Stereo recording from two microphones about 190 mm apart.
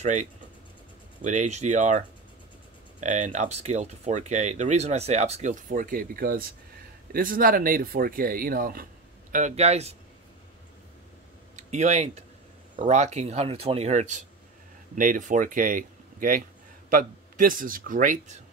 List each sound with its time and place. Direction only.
0.0 s speech: 40° right (ahead or behind)
9.3 s speech: 35° right (ahead or behind)
11.5 s a sound: 40° right (ahead or behind)
12.7 s speech: 40° right (ahead or behind)